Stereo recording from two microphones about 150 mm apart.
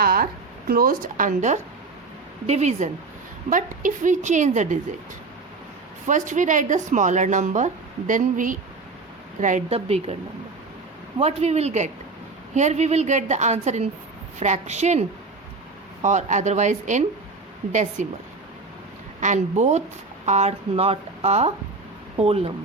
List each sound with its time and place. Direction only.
0.0 s a sound: 75° right (ahead or behind)
0.7 s speech: 70° right (ahead or behind); by 1.5 s 55° right (ahead or behind)
2.5 s a woman's voice: 45° right (ahead or behind)
3.5 s speech: 60° right (ahead or behind)
6.1 s a woman's voice: 55° right (ahead or behind)
11.2 s a woman's voice: 45° right (ahead or behind)
19.2 s a woman's voice: 50° right (ahead or behind)